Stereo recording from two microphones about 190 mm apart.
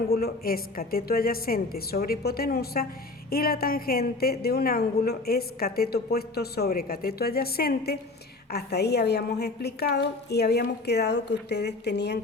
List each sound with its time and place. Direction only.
0.1 s a woman's voice: 50° left (ahead or behind)